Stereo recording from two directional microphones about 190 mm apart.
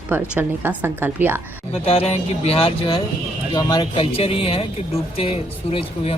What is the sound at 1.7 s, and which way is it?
Speech, 30° left (ahead or behind).